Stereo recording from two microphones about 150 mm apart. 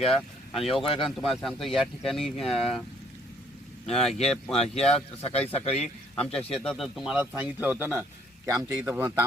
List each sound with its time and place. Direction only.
0.0 s speech: centre (ahead or behind)
0.6 s speech: 40° left (ahead or behind)
0.9 s speech: centre (ahead or behind)
3.8 s speech: centre (ahead or behind)
4.6 s speech: 45° left (ahead or behind)
6.3 s speech: 5° left (ahead or behind); by 9.2 s 15° right (ahead or behind)